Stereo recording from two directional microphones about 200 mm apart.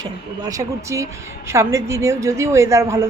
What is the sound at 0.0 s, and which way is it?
A man's voice, 15° right (ahead or behind).